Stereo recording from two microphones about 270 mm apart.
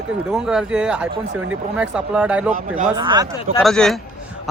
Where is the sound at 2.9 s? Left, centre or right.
Centre.